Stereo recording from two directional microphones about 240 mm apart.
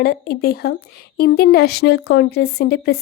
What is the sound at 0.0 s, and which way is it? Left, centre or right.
A woman's voice, left.